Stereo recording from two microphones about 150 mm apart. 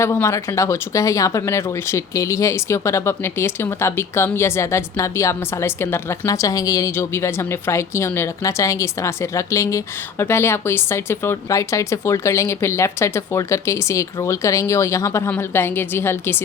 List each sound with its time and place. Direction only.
0.0 s speech: 15° left (ahead or behind)